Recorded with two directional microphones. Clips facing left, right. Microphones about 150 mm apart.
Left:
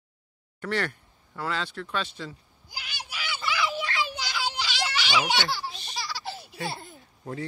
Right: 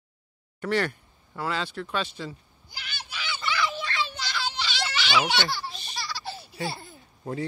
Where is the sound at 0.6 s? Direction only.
10° right (ahead or behind).